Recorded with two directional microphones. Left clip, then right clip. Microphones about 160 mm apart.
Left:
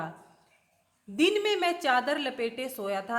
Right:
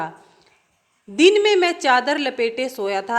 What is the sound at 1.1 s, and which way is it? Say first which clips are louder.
A woman's voice: right 11 dB; 20° right (ahead or behind).